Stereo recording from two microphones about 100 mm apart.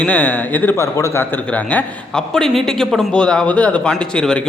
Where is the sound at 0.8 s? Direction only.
30° left (ahead or behind).